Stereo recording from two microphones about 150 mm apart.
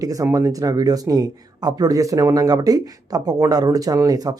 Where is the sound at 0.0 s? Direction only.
25° right (ahead or behind).